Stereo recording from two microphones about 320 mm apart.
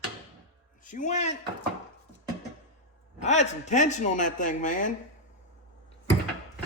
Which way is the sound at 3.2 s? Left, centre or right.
Left.